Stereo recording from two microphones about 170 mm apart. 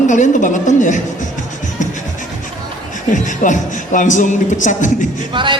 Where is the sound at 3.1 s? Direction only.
50° left (ahead or behind).